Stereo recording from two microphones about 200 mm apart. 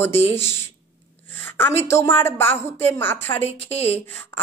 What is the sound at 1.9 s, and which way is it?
A woman's voice, 10° left (ahead or behind).